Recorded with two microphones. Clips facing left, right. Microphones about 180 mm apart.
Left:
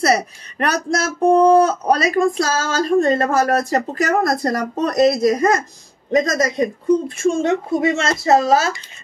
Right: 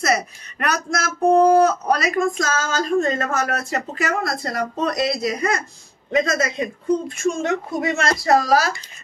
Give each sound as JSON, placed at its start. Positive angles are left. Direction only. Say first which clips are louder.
{"t": 0.0, "sound": "speech", "louder": "left 4 dB", "side_deg": 30}
{"t": 7.2, "sound": "speech", "louder": "left 4 dB", "side_deg": 30}